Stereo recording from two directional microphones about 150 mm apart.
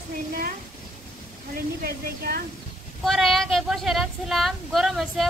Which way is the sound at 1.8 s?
90° right.